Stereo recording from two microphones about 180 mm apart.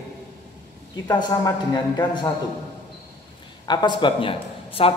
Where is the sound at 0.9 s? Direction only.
25° left (ahead or behind).